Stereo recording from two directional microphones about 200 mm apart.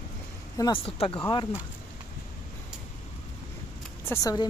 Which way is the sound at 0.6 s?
25° left (ahead or behind).